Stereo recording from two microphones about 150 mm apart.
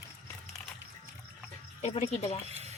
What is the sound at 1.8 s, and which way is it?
Speech, 45° left (ahead or behind).